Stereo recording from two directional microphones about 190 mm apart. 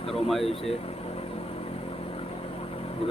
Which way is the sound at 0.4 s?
30° left (ahead or behind).